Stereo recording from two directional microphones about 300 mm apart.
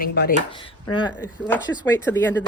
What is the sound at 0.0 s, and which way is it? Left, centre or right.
Speech, left.